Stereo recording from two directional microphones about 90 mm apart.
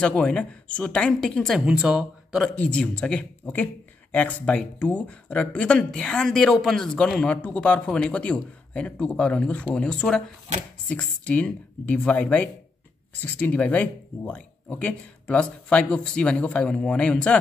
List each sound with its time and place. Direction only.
0.0 s speech: 15° left (ahead or behind)
1.7 s speech: 10° right (ahead or behind)
2.5 s speech: 15° left (ahead or behind)